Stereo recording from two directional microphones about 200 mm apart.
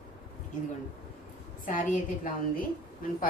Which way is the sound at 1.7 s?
40° left (ahead or behind).